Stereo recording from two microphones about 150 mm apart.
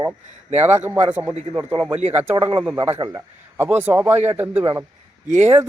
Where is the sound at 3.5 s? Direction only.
15° right (ahead or behind).